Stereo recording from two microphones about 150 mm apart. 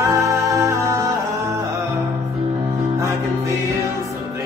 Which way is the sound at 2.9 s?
20° right (ahead or behind).